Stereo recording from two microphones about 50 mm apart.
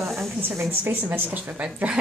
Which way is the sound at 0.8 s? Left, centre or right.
Right.